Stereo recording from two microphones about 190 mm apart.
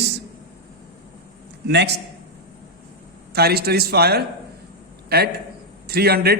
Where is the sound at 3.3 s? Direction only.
55° right (ahead or behind).